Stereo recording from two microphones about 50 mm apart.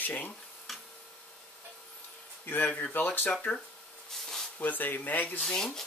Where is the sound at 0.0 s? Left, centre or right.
Left.